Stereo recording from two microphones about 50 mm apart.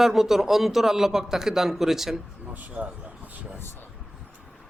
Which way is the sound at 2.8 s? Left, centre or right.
Right.